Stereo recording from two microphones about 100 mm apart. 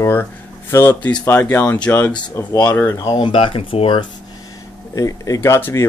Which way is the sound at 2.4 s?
30° left (ahead or behind).